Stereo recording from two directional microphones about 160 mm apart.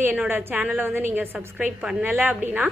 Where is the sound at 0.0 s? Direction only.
10° right (ahead or behind).